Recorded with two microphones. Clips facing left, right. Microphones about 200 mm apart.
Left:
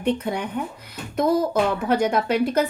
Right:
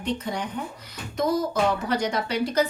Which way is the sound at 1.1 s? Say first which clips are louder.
Left 4 dB; 55° left (ahead or behind).